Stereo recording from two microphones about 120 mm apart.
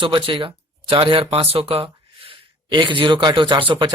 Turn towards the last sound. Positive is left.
turn(degrees=-45)  # may be behind; listen again after turning